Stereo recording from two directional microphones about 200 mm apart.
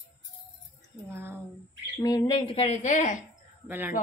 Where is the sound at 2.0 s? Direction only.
20° left (ahead or behind); by 3.2 s 40° left (ahead or behind).